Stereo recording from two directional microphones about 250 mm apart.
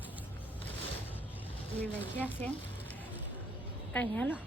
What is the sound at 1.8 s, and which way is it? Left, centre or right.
Speech, centre.